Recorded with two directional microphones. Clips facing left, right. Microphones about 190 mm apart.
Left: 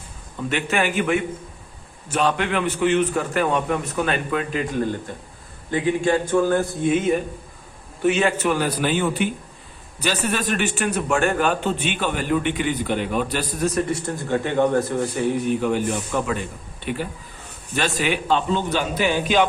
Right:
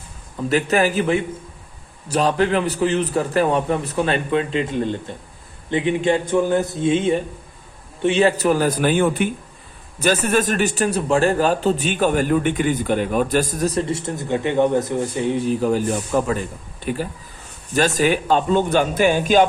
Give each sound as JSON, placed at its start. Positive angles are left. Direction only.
{"t": 0.4, "sound": "a man's voice", "side_deg": -40}
{"t": 13.7, "sound": "a man's voice", "side_deg": -25}